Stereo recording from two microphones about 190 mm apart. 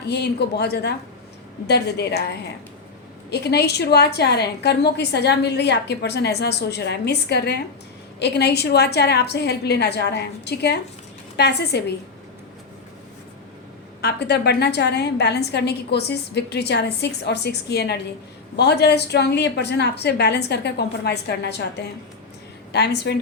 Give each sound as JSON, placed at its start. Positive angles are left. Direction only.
{"t": 0.1, "sound": "a woman's voice", "side_deg": 60}
{"t": 14.0, "sound": "a woman's voice", "side_deg": 60}
{"t": 22.7, "sound": "a woman's voice", "side_deg": 60}